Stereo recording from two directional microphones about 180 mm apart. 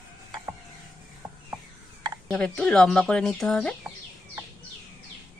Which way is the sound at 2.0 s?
20° right (ahead or behind).